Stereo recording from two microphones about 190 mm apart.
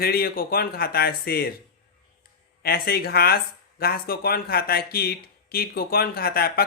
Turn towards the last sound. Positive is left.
turn(degrees=55)  # may be behind; listen again after turning